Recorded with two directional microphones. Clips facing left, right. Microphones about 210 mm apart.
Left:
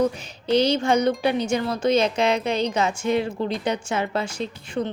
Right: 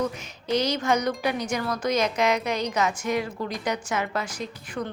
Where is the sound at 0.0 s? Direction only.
30° left (ahead or behind).